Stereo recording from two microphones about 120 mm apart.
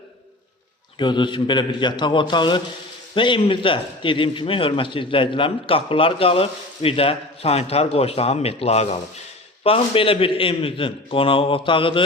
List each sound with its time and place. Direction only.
0.9 s a man's voice: 40° left (ahead or behind)